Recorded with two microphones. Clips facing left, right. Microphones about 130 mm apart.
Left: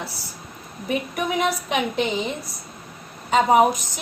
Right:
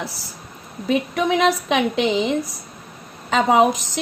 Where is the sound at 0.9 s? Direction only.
90° right.